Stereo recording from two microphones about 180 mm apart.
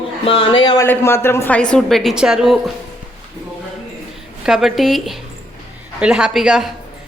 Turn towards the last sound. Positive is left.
turn(degrees=0)  # may be behind; listen again after turning